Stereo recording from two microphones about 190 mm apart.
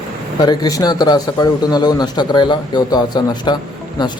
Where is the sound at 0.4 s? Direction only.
20° left (ahead or behind).